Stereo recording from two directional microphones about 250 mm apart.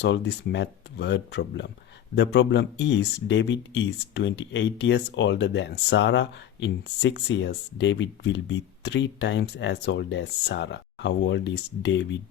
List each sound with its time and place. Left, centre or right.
0.0 s speech: left